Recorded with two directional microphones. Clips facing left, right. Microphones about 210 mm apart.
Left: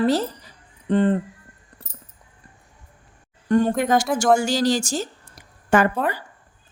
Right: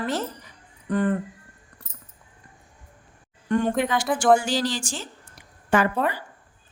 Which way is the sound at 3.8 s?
45° left (ahead or behind).